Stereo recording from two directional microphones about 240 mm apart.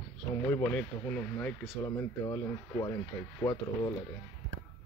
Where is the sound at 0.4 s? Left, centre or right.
Centre.